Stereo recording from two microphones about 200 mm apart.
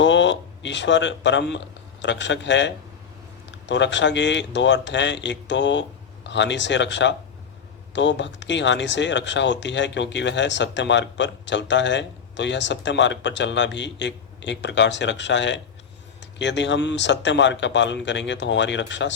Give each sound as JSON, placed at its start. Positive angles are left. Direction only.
{"t": 0.0, "sound": "speech", "side_deg": 65}